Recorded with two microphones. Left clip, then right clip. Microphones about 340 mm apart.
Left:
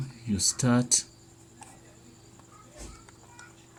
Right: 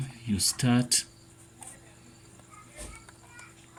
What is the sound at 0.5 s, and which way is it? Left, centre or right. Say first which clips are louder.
Speech: left 2 dB; left.